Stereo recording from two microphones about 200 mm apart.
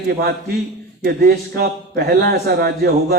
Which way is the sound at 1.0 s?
50° right (ahead or behind).